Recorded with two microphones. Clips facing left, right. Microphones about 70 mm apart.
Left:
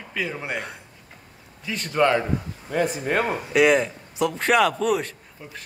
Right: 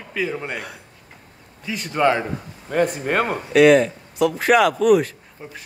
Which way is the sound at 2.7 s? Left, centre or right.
Right.